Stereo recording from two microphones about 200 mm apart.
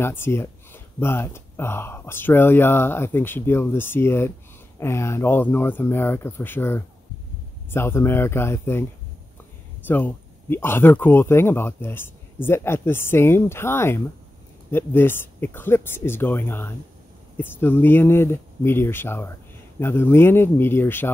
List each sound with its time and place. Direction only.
0.0 s speech: 10° left (ahead or behind)
9.8 s speech: 10° left (ahead or behind)